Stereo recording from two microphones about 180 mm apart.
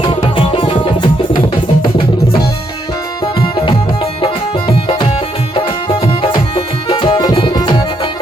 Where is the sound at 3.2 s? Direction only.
25° left (ahead or behind).